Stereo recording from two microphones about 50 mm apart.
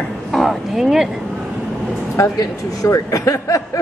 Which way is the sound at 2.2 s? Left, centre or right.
Left.